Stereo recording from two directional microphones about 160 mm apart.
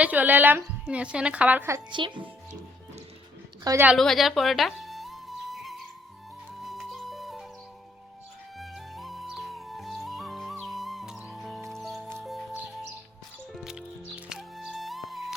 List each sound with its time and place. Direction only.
0.0 s a woman's voice: 10° right (ahead or behind)
1.9 s speech: 30° right (ahead or behind)
3.6 s a woman's voice: 20° right (ahead or behind)
3.9 s music: centre (ahead or behind)
8.5 s music: centre (ahead or behind)
13.5 s music: 5° right (ahead or behind)